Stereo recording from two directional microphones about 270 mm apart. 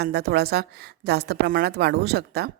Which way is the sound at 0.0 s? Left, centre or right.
Right.